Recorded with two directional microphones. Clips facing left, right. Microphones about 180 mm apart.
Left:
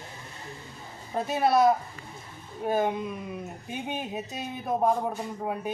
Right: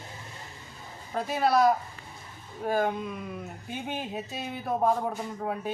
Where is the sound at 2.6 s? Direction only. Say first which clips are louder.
Left 1 dB; 20° left (ahead or behind).